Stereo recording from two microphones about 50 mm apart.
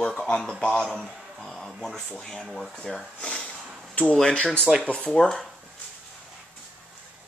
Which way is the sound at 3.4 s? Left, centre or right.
Left.